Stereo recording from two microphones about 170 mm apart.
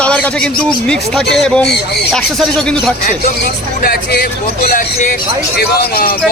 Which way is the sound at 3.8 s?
65° left (ahead or behind).